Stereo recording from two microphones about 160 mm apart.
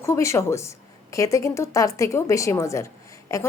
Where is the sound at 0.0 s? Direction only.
20° left (ahead or behind).